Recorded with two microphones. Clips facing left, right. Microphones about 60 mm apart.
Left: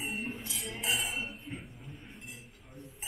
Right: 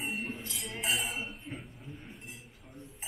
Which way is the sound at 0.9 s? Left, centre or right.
Right.